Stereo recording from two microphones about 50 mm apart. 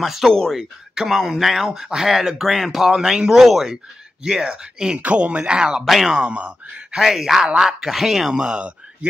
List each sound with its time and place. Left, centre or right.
0.0 s speech: centre
5.9 s speech: centre
6.1 s speech: right
7.0 s speech: centre
8.4 s speech: right